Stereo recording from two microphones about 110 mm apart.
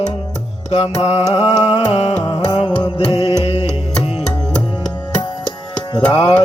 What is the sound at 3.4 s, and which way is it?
Music, 65° left (ahead or behind).